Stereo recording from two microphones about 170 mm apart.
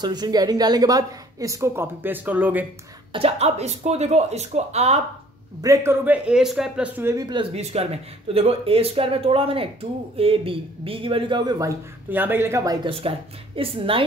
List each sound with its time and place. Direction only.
0.0 s a woman's voice: 25° right (ahead or behind)
3.1 s speech: 35° right (ahead or behind)
5.6 s a man's voice: 15° right (ahead or behind)
7.0 s a man's voice: 15° right (ahead or behind)
7.2 s speech: 35° right (ahead or behind); by 12.7 s 15° right (ahead or behind)
12.8 s speech: 35° right (ahead or behind)